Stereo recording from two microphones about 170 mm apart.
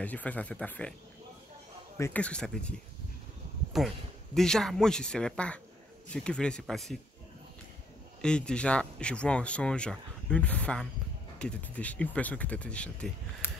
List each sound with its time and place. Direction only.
0.0 s speech: 10° left (ahead or behind)
2.0 s speech: 10° left (ahead or behind)
3.7 s speech: centre (ahead or behind)
8.2 s speech: 5° left (ahead or behind)